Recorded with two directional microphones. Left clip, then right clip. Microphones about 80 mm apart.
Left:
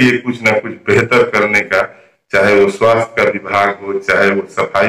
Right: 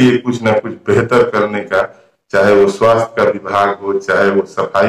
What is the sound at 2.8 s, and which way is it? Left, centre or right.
A man's voice, centre.